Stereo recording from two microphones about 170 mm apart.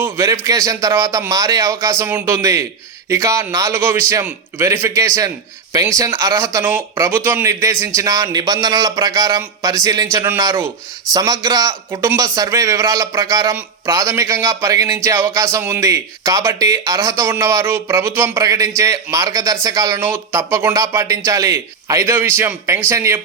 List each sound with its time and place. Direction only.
0.0 s a man's voice: 20° right (ahead or behind)